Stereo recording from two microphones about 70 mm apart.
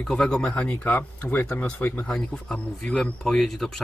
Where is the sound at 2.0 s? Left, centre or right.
Centre.